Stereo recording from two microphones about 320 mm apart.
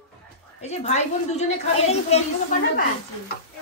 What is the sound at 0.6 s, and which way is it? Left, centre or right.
A woman's voice, centre.